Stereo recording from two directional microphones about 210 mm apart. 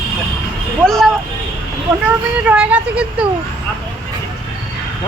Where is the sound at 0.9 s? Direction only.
Centre (ahead or behind).